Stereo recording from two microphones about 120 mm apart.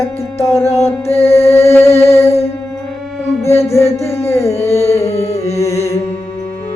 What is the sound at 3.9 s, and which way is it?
Music, 20° left (ahead or behind).